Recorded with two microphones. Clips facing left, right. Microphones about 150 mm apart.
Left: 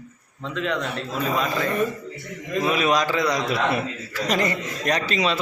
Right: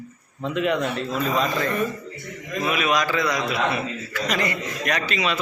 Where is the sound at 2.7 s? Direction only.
35° left (ahead or behind).